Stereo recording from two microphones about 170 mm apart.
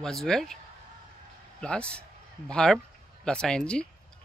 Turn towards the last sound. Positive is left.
turn(degrees=5)  # may be behind; listen again after turning